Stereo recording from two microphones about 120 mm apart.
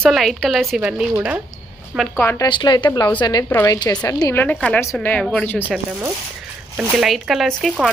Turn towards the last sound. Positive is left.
turn(degrees=0)  # may be behind; listen again after turning